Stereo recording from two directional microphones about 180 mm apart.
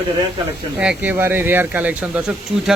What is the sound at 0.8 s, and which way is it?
Speech, 10° right (ahead or behind).